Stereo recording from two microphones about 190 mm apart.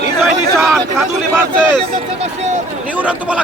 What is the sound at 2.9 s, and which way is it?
Speech, 5° right (ahead or behind).